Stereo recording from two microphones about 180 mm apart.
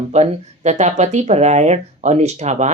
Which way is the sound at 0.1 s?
40° right (ahead or behind).